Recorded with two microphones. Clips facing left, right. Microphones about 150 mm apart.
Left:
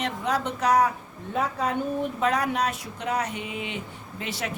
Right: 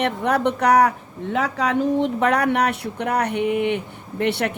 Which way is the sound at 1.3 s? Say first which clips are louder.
Right 5 dB; 80° right.